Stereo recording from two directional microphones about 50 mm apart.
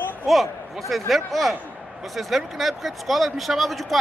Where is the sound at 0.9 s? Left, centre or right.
Centre.